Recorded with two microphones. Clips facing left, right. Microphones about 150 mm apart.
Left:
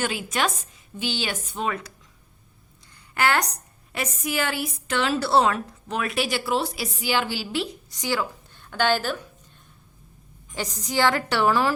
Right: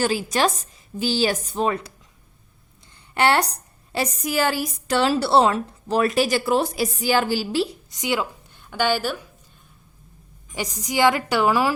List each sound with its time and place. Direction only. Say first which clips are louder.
0.0 s a woman's voice: right 5 dB; 35° right (ahead or behind)
3.2 s a woman's voice: right 4 dB; 30° right (ahead or behind)
7.9 s a woman's voice: right 2 dB; 20° right (ahead or behind)
10.5 s a woman's voice: right 1 dB; 10° right (ahead or behind)